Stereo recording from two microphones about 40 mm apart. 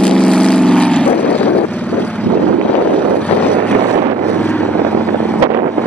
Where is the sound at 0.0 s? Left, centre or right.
Left.